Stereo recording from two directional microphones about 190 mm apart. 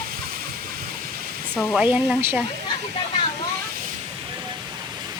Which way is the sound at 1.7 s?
5° right (ahead or behind).